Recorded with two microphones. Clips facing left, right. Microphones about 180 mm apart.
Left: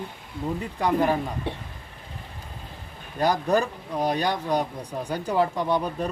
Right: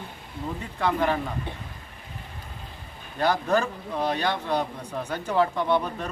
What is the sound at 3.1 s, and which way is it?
A man's voice, 15° left (ahead or behind).